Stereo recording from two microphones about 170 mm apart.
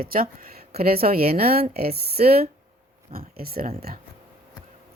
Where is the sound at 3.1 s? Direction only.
60° right (ahead or behind).